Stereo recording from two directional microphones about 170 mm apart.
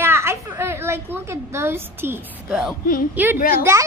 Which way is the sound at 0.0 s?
15° right (ahead or behind).